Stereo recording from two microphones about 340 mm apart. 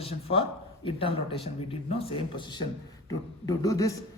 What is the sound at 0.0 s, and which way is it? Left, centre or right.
A man's voice, centre.